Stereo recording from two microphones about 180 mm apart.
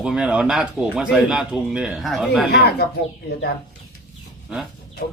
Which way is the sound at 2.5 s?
65° left (ahead or behind).